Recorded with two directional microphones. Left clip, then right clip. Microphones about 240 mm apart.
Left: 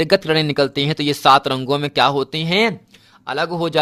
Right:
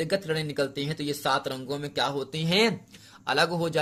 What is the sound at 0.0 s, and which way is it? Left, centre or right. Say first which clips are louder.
A man's voice: left 12 dB; left.